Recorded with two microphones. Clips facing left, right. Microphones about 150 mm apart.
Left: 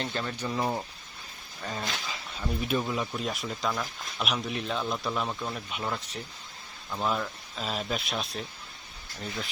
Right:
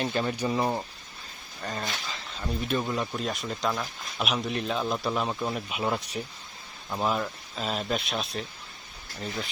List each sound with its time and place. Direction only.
0.0 s speech: 15° right (ahead or behind)
5.3 s speech: 20° right (ahead or behind)
7.1 s speech: 5° right (ahead or behind)